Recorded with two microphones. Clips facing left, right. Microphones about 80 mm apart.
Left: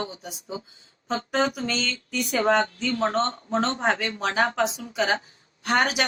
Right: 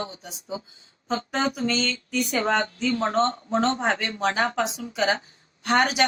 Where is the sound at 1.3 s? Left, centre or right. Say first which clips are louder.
Even; centre.